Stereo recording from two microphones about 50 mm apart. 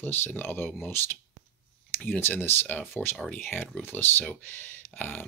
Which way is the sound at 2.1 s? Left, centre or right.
Left.